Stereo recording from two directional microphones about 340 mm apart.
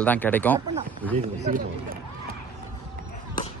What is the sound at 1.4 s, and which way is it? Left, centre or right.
Speech, right.